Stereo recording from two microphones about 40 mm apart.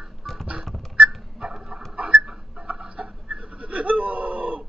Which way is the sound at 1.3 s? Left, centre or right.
Centre.